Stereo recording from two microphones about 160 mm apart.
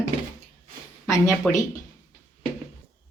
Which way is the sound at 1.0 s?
20° left (ahead or behind).